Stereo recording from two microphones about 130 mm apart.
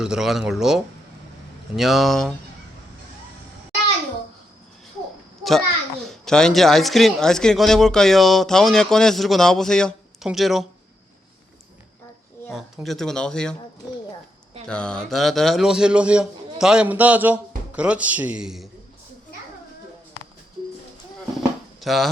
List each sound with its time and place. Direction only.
0.0 s a man's voice: 5° right (ahead or behind)
5.4 s a sound: centre (ahead or behind)
6.1 s a man's voice: 5° left (ahead or behind)
12.5 s a man's voice: centre (ahead or behind)
14.7 s a man's voice: 5° left (ahead or behind)
21.8 s speech: centre (ahead or behind)